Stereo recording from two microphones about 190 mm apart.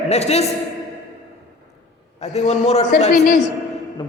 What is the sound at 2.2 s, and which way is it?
Speech, 35° left (ahead or behind).